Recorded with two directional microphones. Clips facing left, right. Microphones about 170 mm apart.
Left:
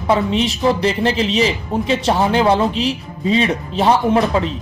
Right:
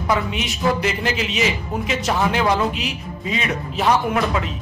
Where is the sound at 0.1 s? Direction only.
30° left (ahead or behind).